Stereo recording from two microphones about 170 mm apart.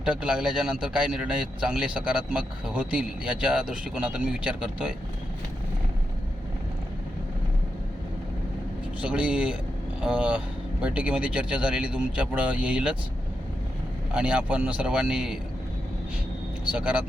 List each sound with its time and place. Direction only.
0.0 s a man's voice: 5° right (ahead or behind)
9.0 s speech: 10° right (ahead or behind)
14.1 s speech: 5° right (ahead or behind)
16.7 s speech: 10° right (ahead or behind)